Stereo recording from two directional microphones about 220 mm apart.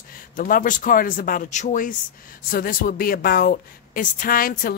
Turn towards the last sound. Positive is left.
turn(degrees=40)  # may be behind; listen again after turning